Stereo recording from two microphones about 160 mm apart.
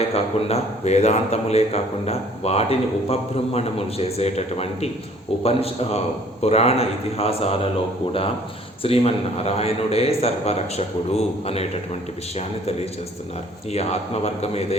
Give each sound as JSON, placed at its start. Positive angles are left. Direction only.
{"t": 0.1, "sound": "a man's voice", "side_deg": 40}
{"t": 8.8, "sound": "a man's voice", "side_deg": 35}